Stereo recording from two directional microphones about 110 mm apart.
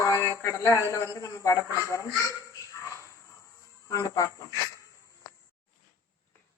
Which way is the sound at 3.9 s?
30° left (ahead or behind).